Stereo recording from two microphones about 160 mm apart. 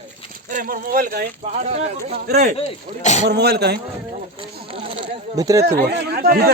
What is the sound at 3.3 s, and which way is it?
Speech, 90° right.